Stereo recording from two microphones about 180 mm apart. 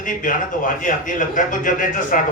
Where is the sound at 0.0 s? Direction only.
50° left (ahead or behind).